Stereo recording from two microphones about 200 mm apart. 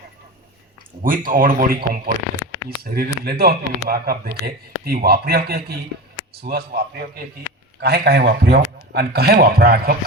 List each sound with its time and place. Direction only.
1.0 s speech: 45° right (ahead or behind)